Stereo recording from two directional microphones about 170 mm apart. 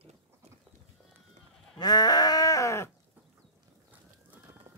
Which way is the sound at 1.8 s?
25° left (ahead or behind).